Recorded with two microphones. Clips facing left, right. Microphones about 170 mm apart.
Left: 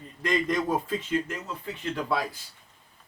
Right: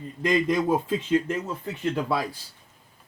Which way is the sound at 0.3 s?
10° right (ahead or behind).